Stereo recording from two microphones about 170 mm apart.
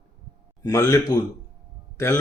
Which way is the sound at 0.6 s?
20° left (ahead or behind).